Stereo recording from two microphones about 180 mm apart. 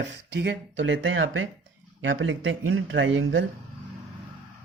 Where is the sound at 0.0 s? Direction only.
75° right (ahead or behind).